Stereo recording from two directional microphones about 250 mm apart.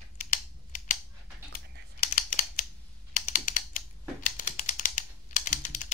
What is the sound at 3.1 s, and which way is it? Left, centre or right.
Typing, left.